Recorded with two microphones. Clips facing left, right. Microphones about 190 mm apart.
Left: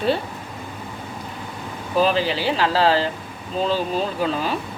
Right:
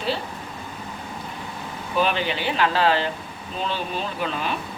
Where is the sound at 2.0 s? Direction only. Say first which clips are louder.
Left 4 dB; 35° left (ahead or behind).